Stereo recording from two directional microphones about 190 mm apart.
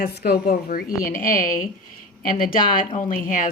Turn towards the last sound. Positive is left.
turn(degrees=45)  # may be behind; listen again after turning